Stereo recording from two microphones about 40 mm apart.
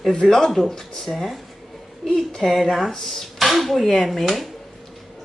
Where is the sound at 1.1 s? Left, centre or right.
Centre.